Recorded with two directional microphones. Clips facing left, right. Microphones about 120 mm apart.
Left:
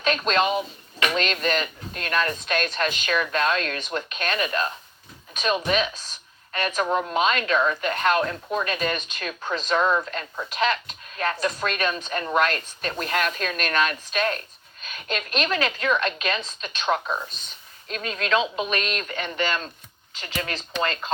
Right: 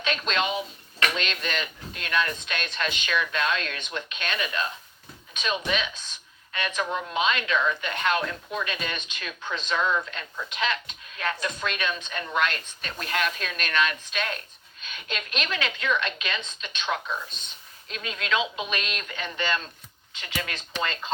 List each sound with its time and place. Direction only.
0.0 s speech: 45° left (ahead or behind)
20.1 s speech: 35° left (ahead or behind)